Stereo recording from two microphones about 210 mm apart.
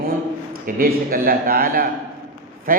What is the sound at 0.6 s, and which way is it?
A man's voice, 45° right (ahead or behind).